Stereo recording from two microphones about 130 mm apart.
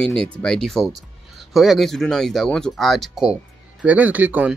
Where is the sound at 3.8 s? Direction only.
10° right (ahead or behind).